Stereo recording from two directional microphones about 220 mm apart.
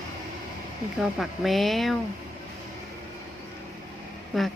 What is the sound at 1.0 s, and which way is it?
Speech, centre (ahead or behind).